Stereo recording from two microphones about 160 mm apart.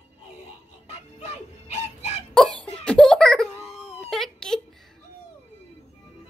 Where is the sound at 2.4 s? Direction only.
Centre (ahead or behind).